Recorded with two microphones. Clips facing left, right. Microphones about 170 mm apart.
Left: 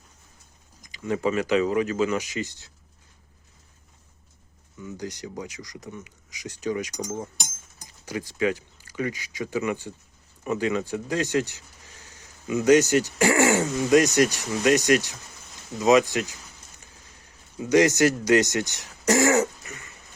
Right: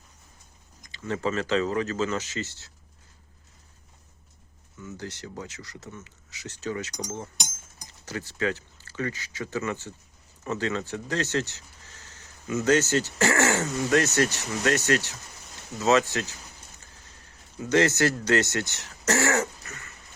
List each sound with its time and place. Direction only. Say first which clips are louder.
0.9 s speech: left 3 dB; 15° left (ahead or behind)
4.8 s speech: left 3 dB; 15° left (ahead or behind)
16.9 s a sound: left 1 dB; 15° left (ahead or behind)